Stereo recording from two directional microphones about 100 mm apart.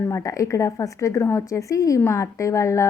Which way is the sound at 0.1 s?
30° left (ahead or behind).